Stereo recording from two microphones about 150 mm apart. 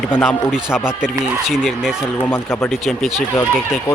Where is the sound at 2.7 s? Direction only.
Centre (ahead or behind).